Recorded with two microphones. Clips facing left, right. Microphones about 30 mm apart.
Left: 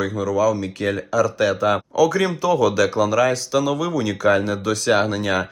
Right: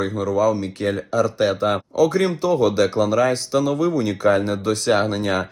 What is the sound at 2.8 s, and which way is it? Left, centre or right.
Speech, right.